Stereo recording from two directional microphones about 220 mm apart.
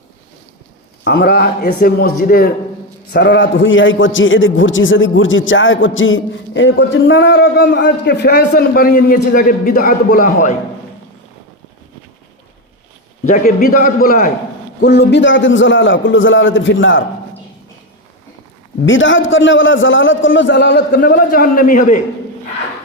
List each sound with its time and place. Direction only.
1.0 s a man's voice: 45° left (ahead or behind)
3.1 s a man's voice: 50° left (ahead or behind)
13.2 s a man's voice: 40° left (ahead or behind)
14.8 s a man's voice: 50° left (ahead or behind)
18.9 s a man's voice: 60° left (ahead or behind); by 22.0 s 35° left (ahead or behind)